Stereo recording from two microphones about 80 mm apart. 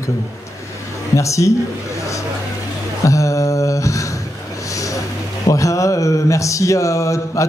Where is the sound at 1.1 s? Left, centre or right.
Left.